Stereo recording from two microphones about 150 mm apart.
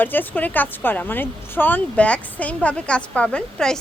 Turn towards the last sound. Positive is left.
turn(degrees=5)  # may be behind; listen again after turning